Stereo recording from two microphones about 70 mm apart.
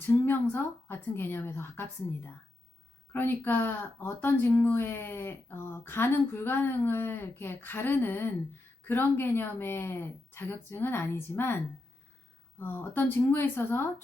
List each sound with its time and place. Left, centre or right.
0.0 s a woman's voice: left